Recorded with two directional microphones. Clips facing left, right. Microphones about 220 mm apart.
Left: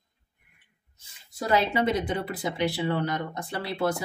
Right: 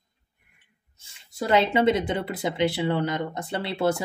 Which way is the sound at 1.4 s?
25° right (ahead or behind).